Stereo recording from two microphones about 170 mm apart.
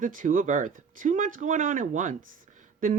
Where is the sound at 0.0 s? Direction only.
50° right (ahead or behind).